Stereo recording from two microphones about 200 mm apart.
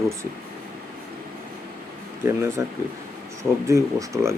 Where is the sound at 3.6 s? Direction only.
15° right (ahead or behind).